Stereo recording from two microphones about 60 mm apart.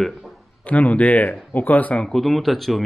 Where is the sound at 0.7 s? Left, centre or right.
Left.